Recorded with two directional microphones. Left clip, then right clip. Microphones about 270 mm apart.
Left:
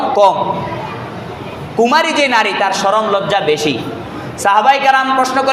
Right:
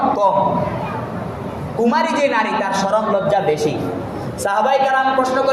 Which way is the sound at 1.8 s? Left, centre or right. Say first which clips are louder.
Left 5 dB; left.